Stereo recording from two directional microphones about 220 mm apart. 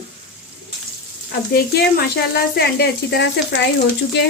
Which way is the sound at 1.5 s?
45° left (ahead or behind).